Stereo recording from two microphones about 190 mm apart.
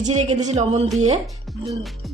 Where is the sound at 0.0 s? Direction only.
35° right (ahead or behind).